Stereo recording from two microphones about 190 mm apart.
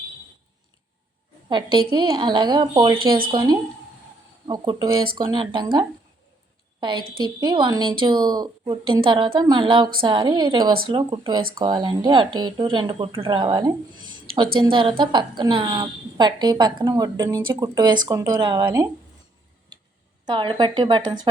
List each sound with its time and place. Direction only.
1.5 s a woman's voice: 25° right (ahead or behind)
20.2 s a woman's voice: 25° right (ahead or behind)